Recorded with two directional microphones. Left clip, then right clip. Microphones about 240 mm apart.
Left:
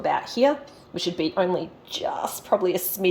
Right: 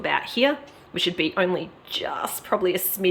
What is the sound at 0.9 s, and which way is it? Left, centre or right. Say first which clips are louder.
Speech: right 1 dB; centre.